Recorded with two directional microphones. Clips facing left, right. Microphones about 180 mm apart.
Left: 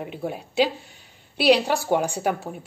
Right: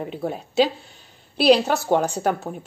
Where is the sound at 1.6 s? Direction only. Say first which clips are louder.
Right 2 dB; 15° left (ahead or behind).